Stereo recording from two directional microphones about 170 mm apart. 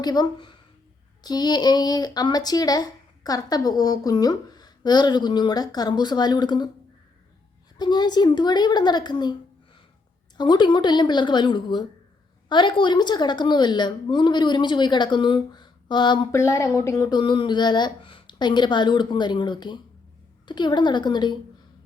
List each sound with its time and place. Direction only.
0.0 s speech: 25° left (ahead or behind)
7.8 s speech: 25° left (ahead or behind)
10.3 s speech: 25° left (ahead or behind)
16.4 s speech: 15° left (ahead or behind)